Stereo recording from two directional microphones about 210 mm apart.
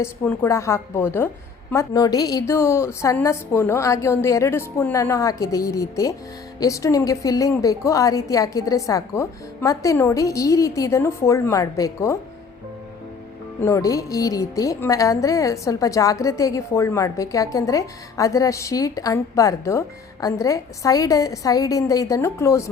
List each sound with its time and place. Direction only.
0.0 s a woman's voice: 15° left (ahead or behind)
13.6 s a woman's voice: 15° left (ahead or behind)